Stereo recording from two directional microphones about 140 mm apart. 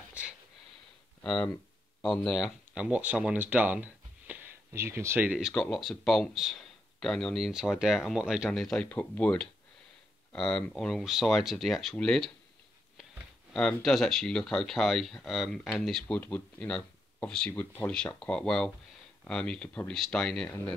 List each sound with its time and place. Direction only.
0.2 s a sound: 10° right (ahead or behind)
1.2 s speech: 5° left (ahead or behind)
2.7 s speech: 10° right (ahead or behind)
5.5 s speech: 5° left (ahead or behind)
13.5 s speech: 5° left (ahead or behind)
16.2 s speech: 15° left (ahead or behind)
20.4 s speech: 15° left (ahead or behind)